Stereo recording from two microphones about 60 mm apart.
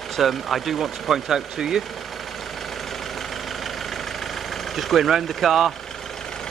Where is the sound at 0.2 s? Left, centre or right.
Centre.